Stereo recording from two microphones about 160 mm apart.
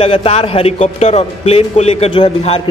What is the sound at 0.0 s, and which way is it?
A man's voice, 35° left (ahead or behind).